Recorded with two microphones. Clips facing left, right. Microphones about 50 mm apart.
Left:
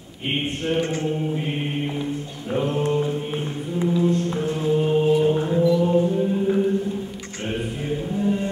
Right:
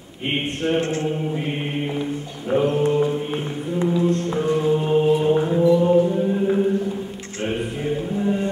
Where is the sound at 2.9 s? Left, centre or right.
Centre.